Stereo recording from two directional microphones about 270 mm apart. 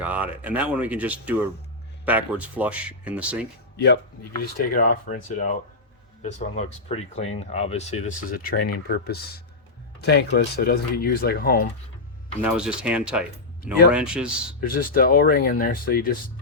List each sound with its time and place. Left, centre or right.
0.0 s speech: centre
3.8 s speech: left
12.4 s speech: centre
14.6 s speech: left